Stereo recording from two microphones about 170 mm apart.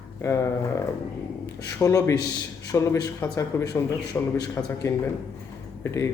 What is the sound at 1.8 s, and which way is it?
A man's voice, 20° left (ahead or behind).